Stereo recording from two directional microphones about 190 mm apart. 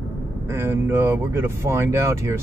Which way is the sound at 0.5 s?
10° right (ahead or behind).